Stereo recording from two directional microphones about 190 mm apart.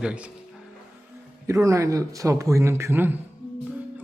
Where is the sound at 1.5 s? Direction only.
15° right (ahead or behind).